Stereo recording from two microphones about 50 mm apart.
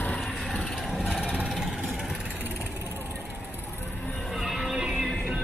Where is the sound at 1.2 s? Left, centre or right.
Centre.